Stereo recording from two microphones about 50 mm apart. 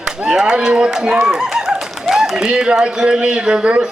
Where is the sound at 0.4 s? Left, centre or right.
Centre.